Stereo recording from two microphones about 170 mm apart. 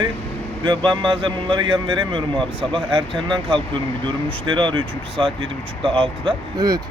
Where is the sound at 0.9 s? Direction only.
30° right (ahead or behind).